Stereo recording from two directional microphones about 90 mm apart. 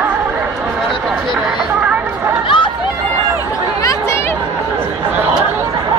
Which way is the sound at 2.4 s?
65° left (ahead or behind).